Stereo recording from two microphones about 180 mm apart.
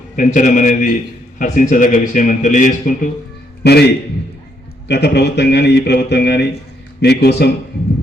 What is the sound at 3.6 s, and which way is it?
A man's voice, 65° left (ahead or behind).